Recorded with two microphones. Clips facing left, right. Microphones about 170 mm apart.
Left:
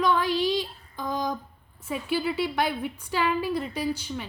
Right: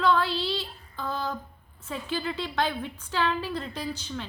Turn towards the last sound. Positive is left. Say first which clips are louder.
# left 4 dB
turn(degrees=10)  # may be behind; listen again after turning